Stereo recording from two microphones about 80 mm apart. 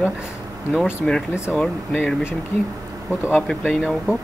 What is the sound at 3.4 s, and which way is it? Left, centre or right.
Speech, centre.